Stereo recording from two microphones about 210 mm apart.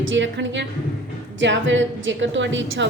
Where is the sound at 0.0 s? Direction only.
60° right (ahead or behind).